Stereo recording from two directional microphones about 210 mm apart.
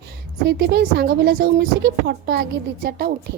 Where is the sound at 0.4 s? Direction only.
50° right (ahead or behind).